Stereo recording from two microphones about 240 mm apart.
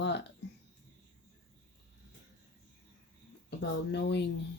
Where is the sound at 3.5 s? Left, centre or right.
Left.